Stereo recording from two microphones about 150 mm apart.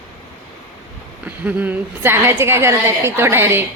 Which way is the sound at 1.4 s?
10° right (ahead or behind).